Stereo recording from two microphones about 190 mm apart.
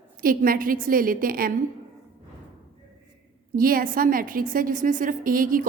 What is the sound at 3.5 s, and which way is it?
A woman's voice, 50° right (ahead or behind).